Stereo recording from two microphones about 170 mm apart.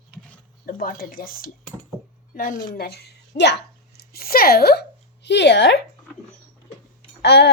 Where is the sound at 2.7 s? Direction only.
65° left (ahead or behind); by 5.7 s 90° left.